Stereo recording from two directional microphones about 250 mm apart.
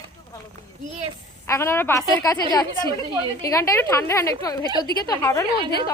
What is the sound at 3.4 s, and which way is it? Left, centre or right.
A woman's voice, centre.